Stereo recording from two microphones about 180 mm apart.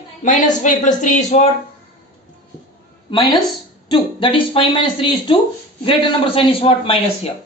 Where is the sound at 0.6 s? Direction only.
45° left (ahead or behind).